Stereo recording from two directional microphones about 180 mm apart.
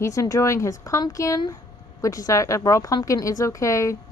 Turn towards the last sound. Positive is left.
turn(degrees=15)  # may be behind; listen again after turning